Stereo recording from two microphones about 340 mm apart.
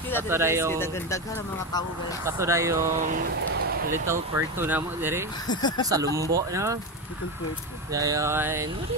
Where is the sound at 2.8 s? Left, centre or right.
Right.